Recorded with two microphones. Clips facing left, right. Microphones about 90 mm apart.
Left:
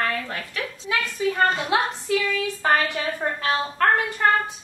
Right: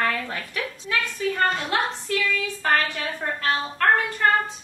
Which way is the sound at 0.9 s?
10° left (ahead or behind).